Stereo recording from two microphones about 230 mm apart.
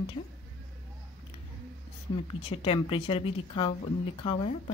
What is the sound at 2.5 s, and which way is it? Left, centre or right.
Speech, left.